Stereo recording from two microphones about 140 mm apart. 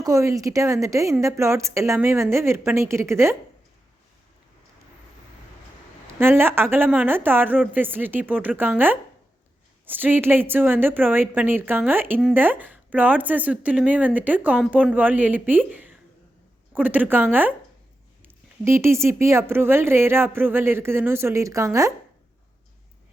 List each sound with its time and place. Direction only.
0.0 s a woman's voice: 20° right (ahead or behind)
6.1 s speech: 15° right (ahead or behind)